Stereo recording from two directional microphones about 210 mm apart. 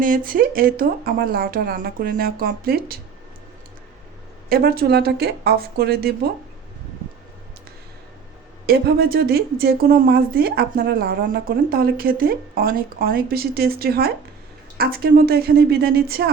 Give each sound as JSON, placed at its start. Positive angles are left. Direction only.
{"t": 0.0, "sound": "speech", "side_deg": -40}
{"t": 4.4, "sound": "speech", "side_deg": -45}
{"t": 8.6, "sound": "speech", "side_deg": -45}